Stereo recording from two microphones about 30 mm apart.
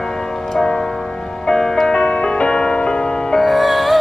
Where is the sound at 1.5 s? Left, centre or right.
Centre.